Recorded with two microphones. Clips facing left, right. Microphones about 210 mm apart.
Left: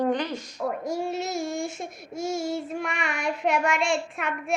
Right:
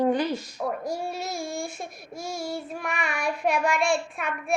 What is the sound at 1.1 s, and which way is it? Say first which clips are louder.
Child singing: left 3 dB; 20° left (ahead or behind).